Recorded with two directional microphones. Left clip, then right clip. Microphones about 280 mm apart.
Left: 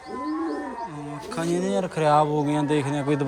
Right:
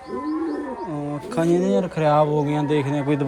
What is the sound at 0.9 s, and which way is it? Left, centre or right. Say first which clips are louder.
Speech: right 6 dB; centre.